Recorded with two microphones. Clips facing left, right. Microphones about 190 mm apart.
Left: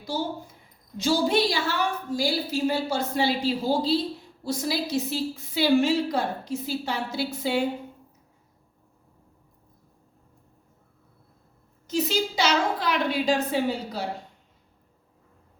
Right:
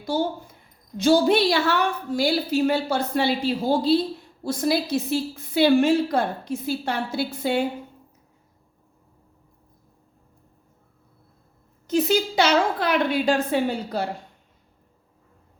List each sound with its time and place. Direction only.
0.0 s a woman's voice: 55° right (ahead or behind)
11.9 s a woman's voice: 55° right (ahead or behind)